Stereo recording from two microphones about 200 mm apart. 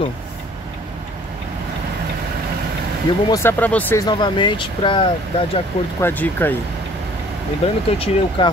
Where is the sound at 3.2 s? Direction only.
15° left (ahead or behind).